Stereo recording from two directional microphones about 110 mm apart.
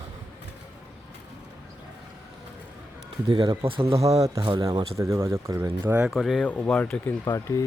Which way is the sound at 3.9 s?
30° right (ahead or behind).